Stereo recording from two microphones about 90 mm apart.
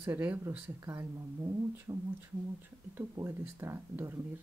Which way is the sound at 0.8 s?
35° right (ahead or behind).